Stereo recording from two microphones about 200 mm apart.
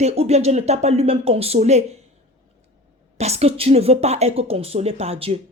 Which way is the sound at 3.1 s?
30° right (ahead or behind).